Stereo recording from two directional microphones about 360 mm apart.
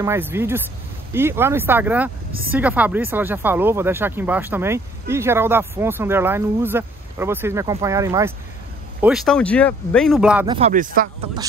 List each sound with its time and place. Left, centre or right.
0.0 s speech: centre
10.4 s speech: centre